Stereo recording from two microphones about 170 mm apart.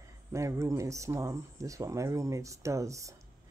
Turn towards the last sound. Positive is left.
turn(degrees=-20)  # may be behind; listen again after turning